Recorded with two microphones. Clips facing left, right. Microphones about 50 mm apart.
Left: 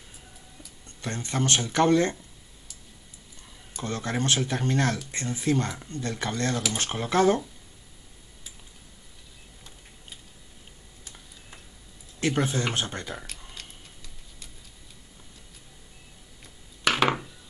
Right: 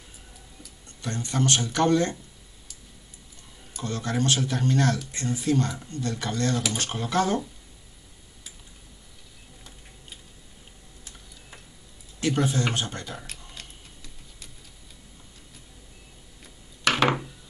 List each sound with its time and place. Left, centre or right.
1.0 s speech: left
3.8 s speech: left
12.2 s speech: left
13.1 s tick-tock: centre
16.8 s chopping: centre